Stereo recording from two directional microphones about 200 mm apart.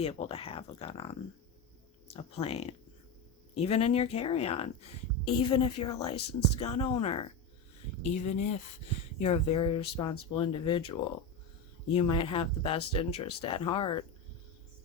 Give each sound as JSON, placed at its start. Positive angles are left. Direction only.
{"t": 0.0, "sound": "speech", "side_deg": 30}
{"t": 2.1, "sound": "speech", "side_deg": 30}